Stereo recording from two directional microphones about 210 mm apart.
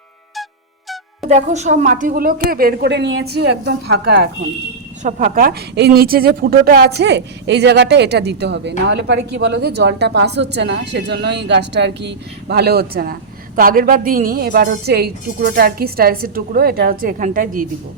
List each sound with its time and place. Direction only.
1.3 s speech: 35° right (ahead or behind)